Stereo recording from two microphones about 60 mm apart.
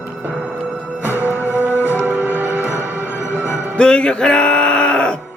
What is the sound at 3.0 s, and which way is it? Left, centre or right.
Music, left.